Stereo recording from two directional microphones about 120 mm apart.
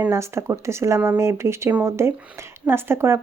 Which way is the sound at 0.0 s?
25° right (ahead or behind).